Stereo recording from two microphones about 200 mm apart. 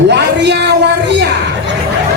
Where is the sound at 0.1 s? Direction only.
60° right (ahead or behind).